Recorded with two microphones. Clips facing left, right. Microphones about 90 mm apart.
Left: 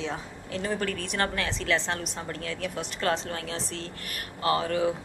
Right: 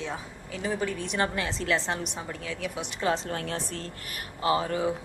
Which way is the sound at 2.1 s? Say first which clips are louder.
Left 1 dB; 5° right (ahead or behind).